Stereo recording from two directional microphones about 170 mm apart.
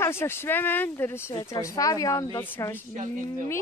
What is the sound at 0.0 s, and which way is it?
Speech, 15° left (ahead or behind).